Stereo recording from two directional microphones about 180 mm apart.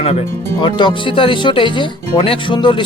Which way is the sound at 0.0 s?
30° left (ahead or behind).